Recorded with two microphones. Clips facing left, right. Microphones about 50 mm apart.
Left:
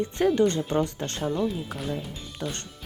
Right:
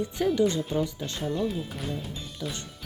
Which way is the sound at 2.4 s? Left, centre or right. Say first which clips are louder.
Left 3 dB; centre.